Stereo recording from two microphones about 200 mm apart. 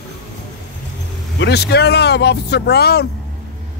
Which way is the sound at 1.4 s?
55° left (ahead or behind).